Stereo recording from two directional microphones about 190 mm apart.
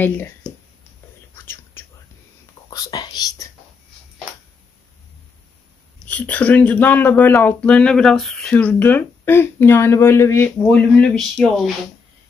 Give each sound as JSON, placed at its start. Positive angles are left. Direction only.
{"t": 0.0, "sound": "speech", "side_deg": 10}
{"t": 1.4, "sound": "whispering", "side_deg": 10}
{"t": 2.7, "sound": "speech", "side_deg": 20}
{"t": 6.0, "sound": "speech", "side_deg": 5}